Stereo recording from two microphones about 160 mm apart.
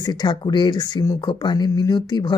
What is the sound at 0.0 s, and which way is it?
Speech, 25° left (ahead or behind).